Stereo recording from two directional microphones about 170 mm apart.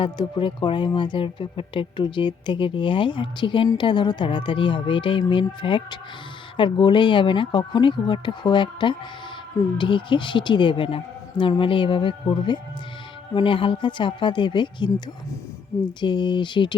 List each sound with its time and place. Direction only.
0.0 s speech: 30° left (ahead or behind)
16.0 s speech: 25° left (ahead or behind)